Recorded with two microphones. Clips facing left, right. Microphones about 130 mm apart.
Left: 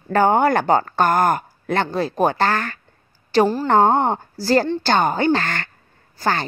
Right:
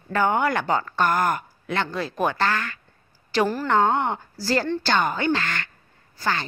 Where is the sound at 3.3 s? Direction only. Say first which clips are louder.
Left 5 dB; 30° left (ahead or behind).